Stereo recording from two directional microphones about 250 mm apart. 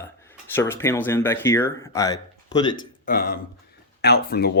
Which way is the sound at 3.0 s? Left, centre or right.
Left.